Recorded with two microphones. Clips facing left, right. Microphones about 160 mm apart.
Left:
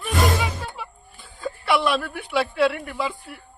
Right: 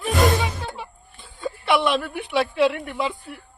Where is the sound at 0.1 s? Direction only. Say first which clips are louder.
Right 2 dB; centre (ahead or behind).